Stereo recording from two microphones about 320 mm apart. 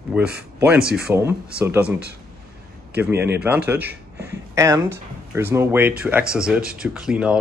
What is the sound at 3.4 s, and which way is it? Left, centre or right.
Speech, centre.